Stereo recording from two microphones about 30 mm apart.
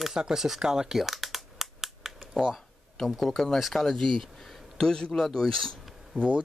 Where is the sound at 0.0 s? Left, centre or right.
Centre.